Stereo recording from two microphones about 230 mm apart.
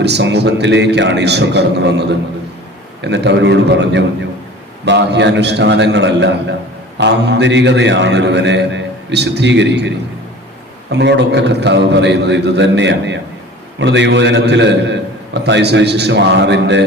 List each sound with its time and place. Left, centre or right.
0.0 s a man's voice: right
10.9 s a man's voice: right